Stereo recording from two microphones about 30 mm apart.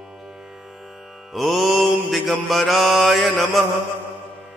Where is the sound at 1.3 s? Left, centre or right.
Centre.